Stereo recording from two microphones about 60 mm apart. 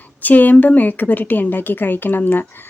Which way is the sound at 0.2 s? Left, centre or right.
Left.